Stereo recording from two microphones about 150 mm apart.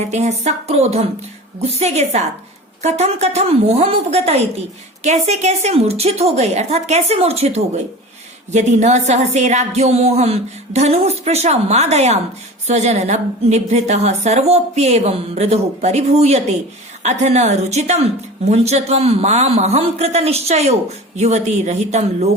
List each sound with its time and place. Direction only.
0.0 s a woman's voice: 50° right (ahead or behind)